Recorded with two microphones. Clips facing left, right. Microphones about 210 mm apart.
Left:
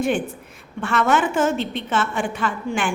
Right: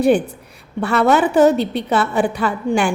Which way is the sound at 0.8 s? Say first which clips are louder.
Right 5 dB; 35° right (ahead or behind).